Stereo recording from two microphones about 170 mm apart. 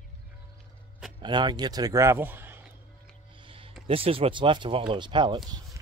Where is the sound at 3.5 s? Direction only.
30° right (ahead or behind).